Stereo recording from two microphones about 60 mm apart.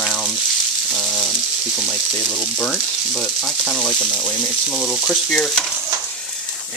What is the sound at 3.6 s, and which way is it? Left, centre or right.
Speech, centre.